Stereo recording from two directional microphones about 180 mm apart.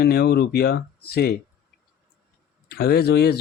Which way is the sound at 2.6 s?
60° left (ahead or behind).